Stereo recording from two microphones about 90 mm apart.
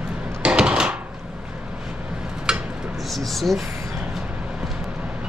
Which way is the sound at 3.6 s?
35° right (ahead or behind).